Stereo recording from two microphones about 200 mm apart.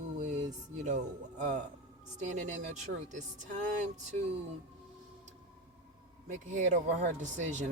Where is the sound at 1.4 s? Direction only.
35° right (ahead or behind).